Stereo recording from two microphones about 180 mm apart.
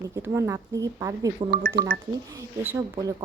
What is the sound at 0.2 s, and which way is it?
A woman's voice, 15° right (ahead or behind).